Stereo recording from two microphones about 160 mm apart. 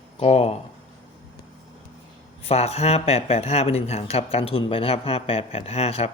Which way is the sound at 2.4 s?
40° left (ahead or behind).